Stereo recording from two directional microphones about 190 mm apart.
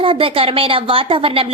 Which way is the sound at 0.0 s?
25° right (ahead or behind).